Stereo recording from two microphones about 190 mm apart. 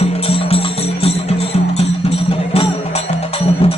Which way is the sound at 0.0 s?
30° left (ahead or behind).